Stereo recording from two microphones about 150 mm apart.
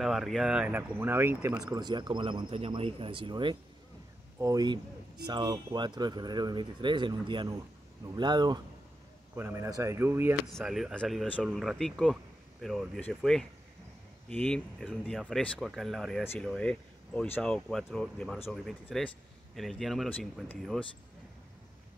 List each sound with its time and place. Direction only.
0.0 s speech: centre (ahead or behind)
1.5 s speech: 25° right (ahead or behind)
9.3 s speech: 15° right (ahead or behind)
10.4 s speech: centre (ahead or behind)